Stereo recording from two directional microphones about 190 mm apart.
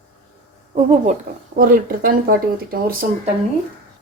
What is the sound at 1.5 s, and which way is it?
Speech, 50° right (ahead or behind).